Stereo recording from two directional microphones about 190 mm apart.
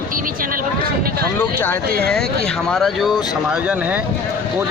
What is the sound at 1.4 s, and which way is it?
Speech, 10° left (ahead or behind).